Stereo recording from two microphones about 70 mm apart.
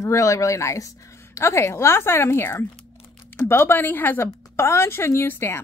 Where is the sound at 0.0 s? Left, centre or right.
Left.